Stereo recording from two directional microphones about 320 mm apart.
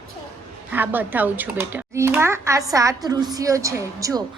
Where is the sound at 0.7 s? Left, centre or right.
Centre.